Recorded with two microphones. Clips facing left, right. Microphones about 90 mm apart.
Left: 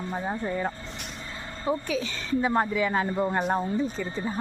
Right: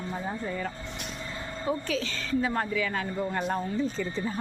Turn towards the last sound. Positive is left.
turn(degrees=10)  # may be behind; listen again after turning